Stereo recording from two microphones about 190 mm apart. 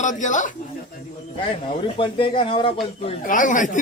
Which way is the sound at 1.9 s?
25° left (ahead or behind).